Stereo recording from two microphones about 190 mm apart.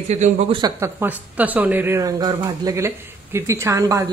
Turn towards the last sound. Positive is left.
turn(degrees=-15)  # may be behind; listen again after turning